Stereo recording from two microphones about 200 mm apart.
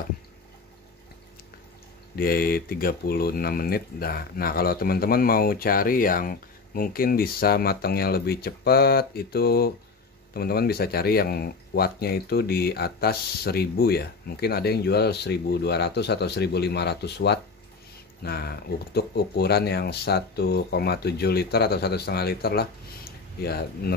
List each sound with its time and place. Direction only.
2.1 s speech: 50° left (ahead or behind)